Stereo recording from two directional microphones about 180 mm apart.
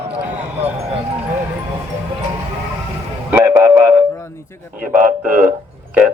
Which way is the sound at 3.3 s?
10° right (ahead or behind).